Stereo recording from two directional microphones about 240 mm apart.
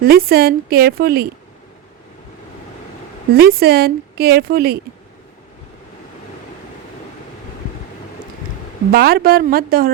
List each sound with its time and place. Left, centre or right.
0.0 s a woman's voice: right
3.3 s a woman's voice: right
8.9 s a woman's voice: right